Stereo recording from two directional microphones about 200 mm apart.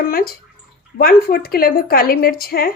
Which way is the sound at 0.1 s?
50° left (ahead or behind).